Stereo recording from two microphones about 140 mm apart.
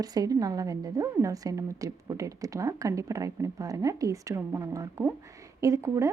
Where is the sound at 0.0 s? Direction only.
25° right (ahead or behind).